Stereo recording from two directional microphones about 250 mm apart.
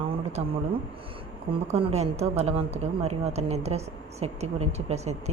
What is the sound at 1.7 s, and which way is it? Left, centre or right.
A woman's voice, right.